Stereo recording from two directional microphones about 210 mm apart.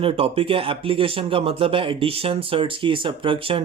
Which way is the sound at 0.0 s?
25° right (ahead or behind).